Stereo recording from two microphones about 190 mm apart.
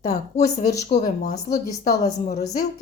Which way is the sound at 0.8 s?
35° left (ahead or behind).